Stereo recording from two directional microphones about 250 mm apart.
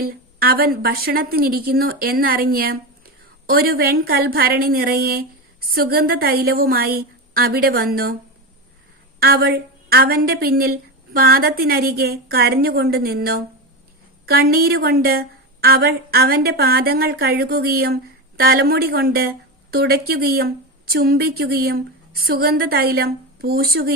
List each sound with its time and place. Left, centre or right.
0.0 s a woman's voice: right
9.2 s a woman's voice: right